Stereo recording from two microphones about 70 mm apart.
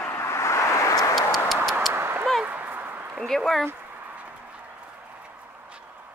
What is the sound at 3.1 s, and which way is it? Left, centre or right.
Speech, centre.